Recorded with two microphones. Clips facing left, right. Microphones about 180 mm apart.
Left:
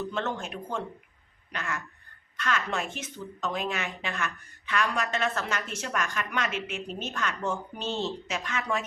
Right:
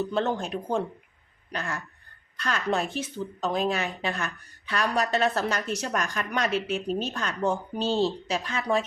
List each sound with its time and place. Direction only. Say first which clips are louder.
0.1 s speech: right 5 dB; 35° right (ahead or behind)